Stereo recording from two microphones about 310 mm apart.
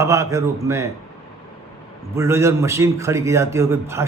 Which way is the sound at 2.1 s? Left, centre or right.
Centre.